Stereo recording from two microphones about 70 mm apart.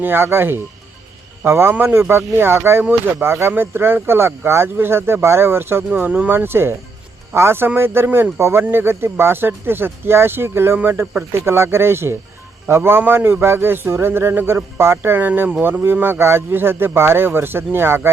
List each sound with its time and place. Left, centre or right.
0.0 s a man's voice: right